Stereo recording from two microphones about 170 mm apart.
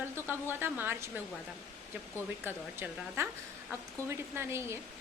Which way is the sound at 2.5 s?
15° right (ahead or behind).